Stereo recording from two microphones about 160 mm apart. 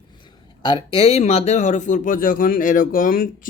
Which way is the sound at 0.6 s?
35° left (ahead or behind).